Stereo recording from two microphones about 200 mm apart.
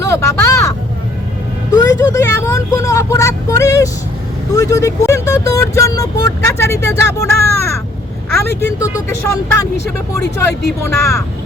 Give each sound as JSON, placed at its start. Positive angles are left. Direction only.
{"t": 0.0, "sound": "vehicle", "side_deg": 15}
{"t": 1.7, "sound": "speech", "side_deg": 15}